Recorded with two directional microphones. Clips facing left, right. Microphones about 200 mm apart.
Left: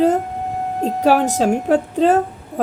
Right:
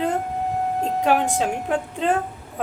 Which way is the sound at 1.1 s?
40° left (ahead or behind).